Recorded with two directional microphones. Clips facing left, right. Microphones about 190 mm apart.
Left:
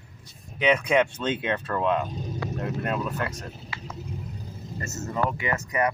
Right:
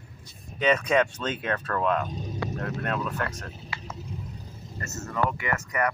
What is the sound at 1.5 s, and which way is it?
Speech, 20° left (ahead or behind).